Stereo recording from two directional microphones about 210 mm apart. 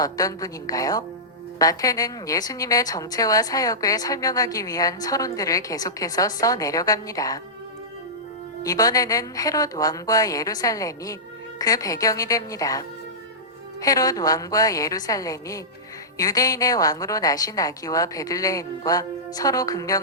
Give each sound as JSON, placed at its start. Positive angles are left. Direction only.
{"t": 0.0, "sound": "a woman's voice", "side_deg": 15}
{"t": 8.6, "sound": "a woman's voice", "side_deg": 15}
{"t": 13.8, "sound": "a woman's voice", "side_deg": 15}